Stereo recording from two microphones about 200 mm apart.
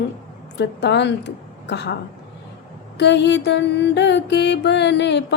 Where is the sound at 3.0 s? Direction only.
60° left (ahead or behind).